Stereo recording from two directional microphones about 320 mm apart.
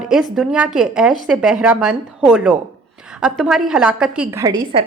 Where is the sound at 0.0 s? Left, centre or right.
Centre.